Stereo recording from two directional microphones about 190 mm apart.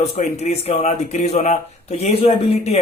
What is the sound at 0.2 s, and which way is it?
Speech, 35° left (ahead or behind).